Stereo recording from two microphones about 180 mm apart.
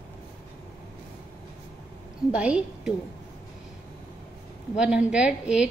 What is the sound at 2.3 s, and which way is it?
Speech, 5° right (ahead or behind).